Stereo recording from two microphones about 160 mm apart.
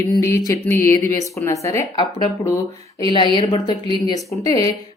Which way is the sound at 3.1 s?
30° left (ahead or behind).